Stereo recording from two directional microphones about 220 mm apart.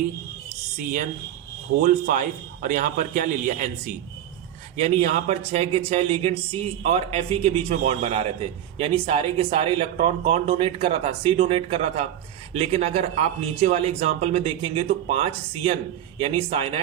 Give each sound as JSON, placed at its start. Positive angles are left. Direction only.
{"t": 0.8, "sound": "a man's voice", "side_deg": -40}